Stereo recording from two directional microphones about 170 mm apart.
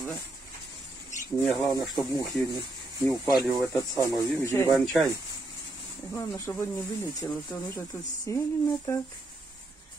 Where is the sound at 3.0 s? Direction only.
20° left (ahead or behind).